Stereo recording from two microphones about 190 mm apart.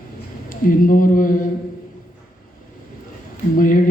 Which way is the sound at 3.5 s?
45° left (ahead or behind).